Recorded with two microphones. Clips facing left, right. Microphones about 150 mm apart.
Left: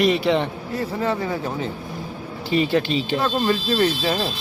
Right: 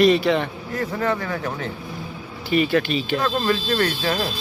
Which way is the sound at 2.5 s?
25° left (ahead or behind).